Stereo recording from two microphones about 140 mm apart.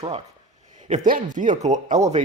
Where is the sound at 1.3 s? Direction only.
65° right (ahead or behind).